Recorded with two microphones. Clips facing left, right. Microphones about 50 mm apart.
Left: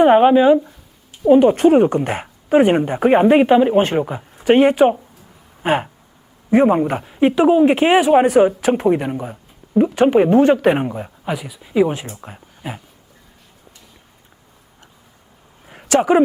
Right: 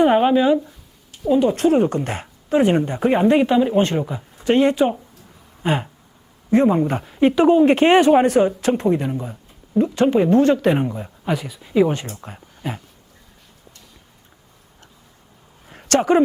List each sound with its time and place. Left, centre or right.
0.0 s speech: centre
1.3 s speech: left
1.5 s speech: centre
3.8 s speech: centre
6.8 s speech: centre
8.9 s speech: left
11.3 s speech: centre
15.6 s a sound: centre